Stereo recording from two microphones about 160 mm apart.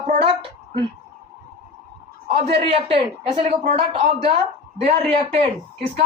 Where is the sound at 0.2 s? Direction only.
35° right (ahead or behind).